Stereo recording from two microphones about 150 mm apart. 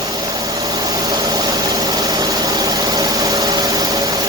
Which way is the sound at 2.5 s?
25° right (ahead or behind).